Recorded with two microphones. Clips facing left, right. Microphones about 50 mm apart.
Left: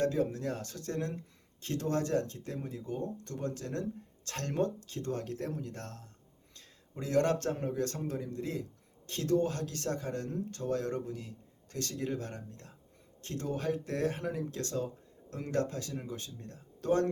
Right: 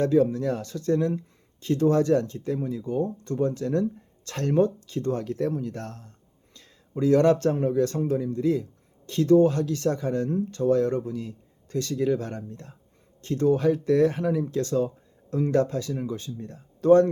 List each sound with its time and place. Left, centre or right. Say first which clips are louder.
0.0 s speech: right 9 dB; right